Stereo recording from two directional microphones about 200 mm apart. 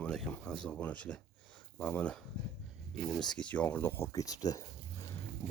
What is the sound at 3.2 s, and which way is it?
Speech, 5° left (ahead or behind).